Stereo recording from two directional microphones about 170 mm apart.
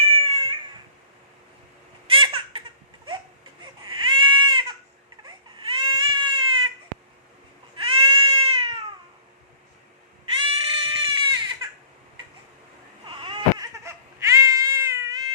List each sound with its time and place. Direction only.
0.0 s cat: 35° right (ahead or behind)
2.0 s baby laughter: 30° right (ahead or behind)
3.6 s baby cry: 30° right (ahead or behind)
5.2 s baby cry: 30° right (ahead or behind)
7.8 s goat: 30° right (ahead or behind)
10.3 s baby cry: 30° right (ahead or behind)
13.1 s baby cry: 30° right (ahead or behind)
13.8 s baby cry: 15° right (ahead or behind)